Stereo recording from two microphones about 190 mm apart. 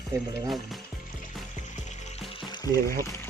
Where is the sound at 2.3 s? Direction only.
25° left (ahead or behind).